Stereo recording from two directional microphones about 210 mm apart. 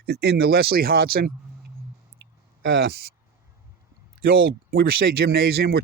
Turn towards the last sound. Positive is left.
turn(degrees=-50)  # may be behind; listen again after turning